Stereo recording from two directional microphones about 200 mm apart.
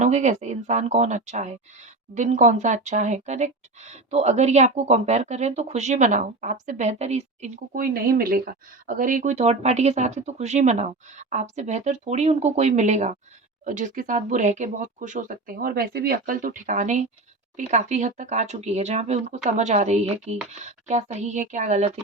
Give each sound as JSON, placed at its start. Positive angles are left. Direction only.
{"t": 0.0, "sound": "speech", "side_deg": -35}